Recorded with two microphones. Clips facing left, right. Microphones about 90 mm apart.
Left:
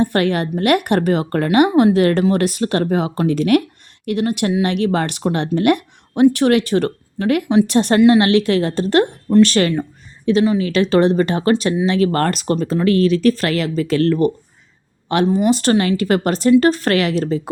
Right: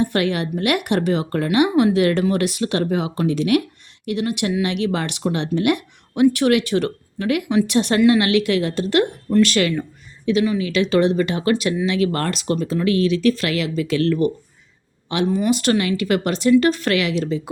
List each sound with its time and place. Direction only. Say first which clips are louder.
0.0 s speech: left 3 dB; 40° left (ahead or behind)
15.4 s speech: left 3 dB; 35° left (ahead or behind)